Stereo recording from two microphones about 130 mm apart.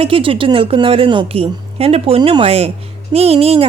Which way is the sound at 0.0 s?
45° right (ahead or behind).